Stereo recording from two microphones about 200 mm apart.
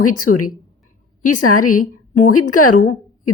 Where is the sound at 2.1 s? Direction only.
90° left.